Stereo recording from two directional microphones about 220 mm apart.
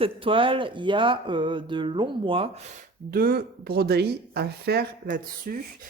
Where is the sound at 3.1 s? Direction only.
40° right (ahead or behind).